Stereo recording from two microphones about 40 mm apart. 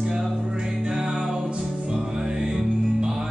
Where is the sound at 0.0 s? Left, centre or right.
Centre.